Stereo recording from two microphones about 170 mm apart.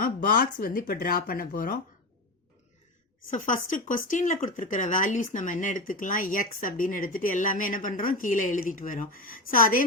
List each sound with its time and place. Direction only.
0.0 s speech: 55° left (ahead or behind)
3.2 s speech: 50° left (ahead or behind)